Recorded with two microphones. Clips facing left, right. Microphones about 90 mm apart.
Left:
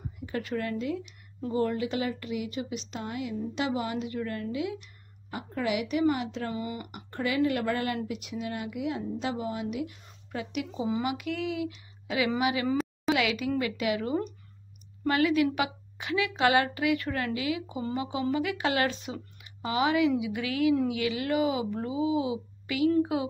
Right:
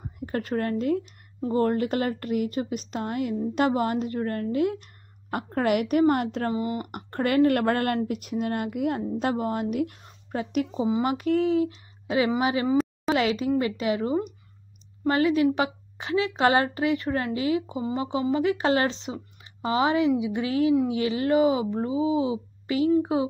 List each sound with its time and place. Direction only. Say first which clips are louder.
0.2 s a woman's voice: right 5 dB; 45° right (ahead or behind)
6.5 s a woman's voice: right 6 dB; 30° right (ahead or behind)
6.9 s a woman's voice: right 4 dB; 55° right (ahead or behind); by 23.3 s 30° right (ahead or behind)